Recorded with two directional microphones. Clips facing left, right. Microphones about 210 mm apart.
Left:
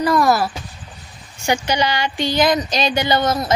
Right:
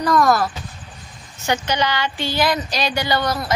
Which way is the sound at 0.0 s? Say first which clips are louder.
Left 1 dB; 5° left (ahead or behind).